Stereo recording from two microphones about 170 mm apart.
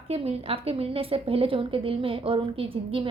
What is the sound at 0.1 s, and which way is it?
A woman's voice, 35° right (ahead or behind).